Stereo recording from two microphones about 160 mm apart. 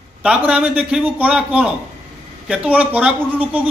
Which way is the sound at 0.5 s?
5° right (ahead or behind).